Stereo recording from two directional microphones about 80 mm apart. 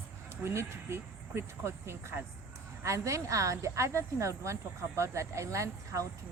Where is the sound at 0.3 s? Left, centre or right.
Right.